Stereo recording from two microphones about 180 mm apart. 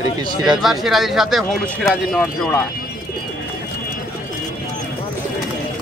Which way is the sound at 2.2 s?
10° left (ahead or behind).